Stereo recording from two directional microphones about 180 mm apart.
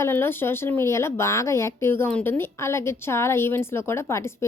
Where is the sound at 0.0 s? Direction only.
10° left (ahead or behind).